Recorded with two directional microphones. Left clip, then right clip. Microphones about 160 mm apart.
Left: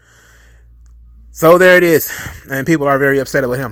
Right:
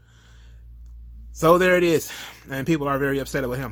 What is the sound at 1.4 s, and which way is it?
Speech, 35° left (ahead or behind).